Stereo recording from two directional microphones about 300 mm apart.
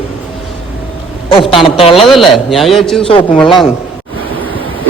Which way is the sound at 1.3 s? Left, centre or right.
Centre.